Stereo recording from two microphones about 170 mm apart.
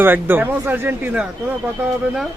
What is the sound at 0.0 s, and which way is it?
Speech, 10° right (ahead or behind).